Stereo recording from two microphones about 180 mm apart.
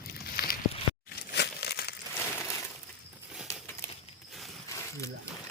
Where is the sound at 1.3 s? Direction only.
65° left (ahead or behind).